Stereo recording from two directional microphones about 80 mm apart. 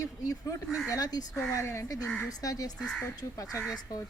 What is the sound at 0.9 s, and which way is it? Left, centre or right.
A woman's voice, left.